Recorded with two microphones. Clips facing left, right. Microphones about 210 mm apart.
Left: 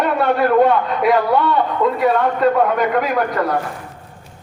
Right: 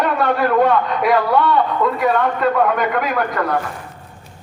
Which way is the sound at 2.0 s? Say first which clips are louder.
Left 2 dB; 35° left (ahead or behind).